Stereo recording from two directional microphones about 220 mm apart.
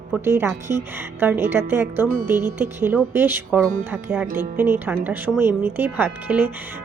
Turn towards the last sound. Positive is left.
turn(degrees=-10)  # may be behind; listen again after turning